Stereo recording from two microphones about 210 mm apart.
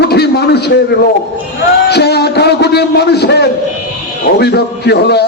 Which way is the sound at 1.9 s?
50° left (ahead or behind).